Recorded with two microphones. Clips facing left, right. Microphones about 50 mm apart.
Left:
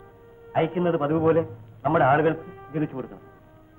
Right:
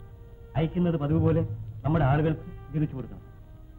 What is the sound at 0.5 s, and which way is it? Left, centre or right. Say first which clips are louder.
A man's voice: left 5 dB; left.